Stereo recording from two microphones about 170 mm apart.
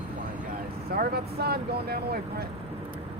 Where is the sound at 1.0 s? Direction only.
65° right (ahead or behind).